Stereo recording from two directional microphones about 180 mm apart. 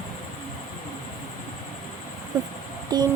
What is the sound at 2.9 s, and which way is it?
Speech, 25° right (ahead or behind).